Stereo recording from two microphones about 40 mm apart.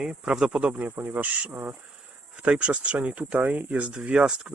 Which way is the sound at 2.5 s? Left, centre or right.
Right.